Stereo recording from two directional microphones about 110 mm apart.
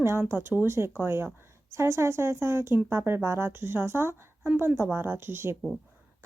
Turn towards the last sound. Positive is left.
turn(degrees=-20)  # may be behind; listen again after turning